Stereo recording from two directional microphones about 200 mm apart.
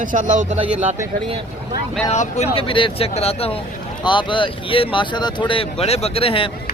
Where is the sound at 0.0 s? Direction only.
40° right (ahead or behind).